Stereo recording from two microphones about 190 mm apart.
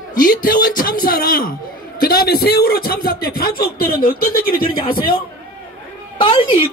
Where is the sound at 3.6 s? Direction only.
50° left (ahead or behind).